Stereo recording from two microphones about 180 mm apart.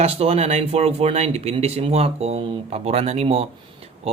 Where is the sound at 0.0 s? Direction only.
35° right (ahead or behind).